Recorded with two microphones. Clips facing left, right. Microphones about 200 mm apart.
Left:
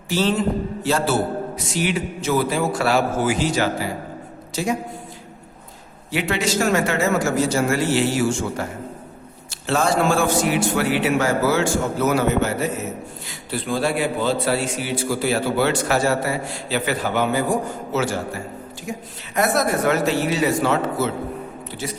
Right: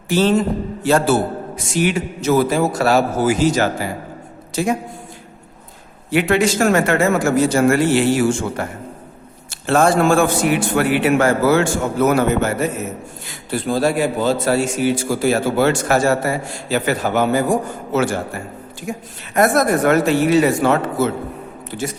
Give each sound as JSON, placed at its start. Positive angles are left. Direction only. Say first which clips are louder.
{"t": 0.1, "sound": "a man's voice", "louder": "right 4 dB", "side_deg": -50}
{"t": 6.1, "sound": "a man's voice", "louder": "right 7 dB", "side_deg": -55}
{"t": 9.6, "sound": "a man's voice", "louder": "right 5 dB", "side_deg": -55}